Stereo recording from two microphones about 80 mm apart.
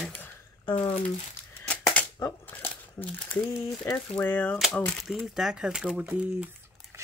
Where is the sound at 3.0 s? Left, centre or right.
Centre.